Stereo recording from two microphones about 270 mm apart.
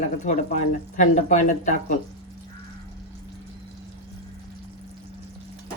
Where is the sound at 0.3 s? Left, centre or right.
Left.